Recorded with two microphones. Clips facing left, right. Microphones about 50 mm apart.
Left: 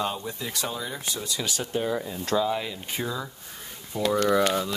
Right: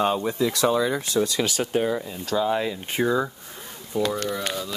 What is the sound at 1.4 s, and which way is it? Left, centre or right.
Speech, right.